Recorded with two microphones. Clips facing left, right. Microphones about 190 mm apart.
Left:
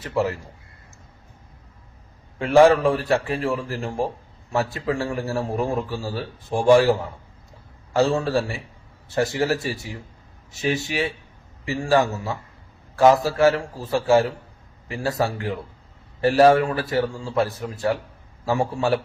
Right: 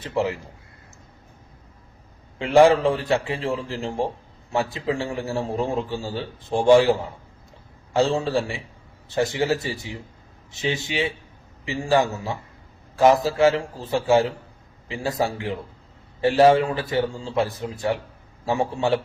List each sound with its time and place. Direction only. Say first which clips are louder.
0.0 s speech: left 1 dB; 20° right (ahead or behind)
2.4 s a man's voice: left 1 dB; 20° right (ahead or behind)